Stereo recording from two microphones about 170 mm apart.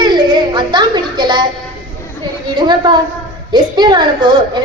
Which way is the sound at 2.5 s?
25° right (ahead or behind).